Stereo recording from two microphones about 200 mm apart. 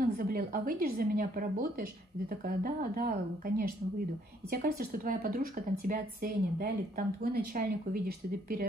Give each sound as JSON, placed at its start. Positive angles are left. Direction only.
{"t": 0.0, "sound": "a woman's voice", "side_deg": -45}